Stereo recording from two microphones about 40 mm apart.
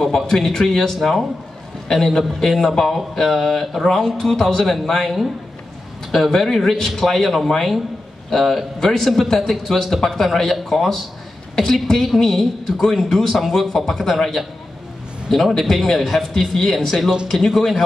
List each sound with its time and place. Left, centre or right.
0.0 s a woman's voice: centre
6.4 s a woman's voice: centre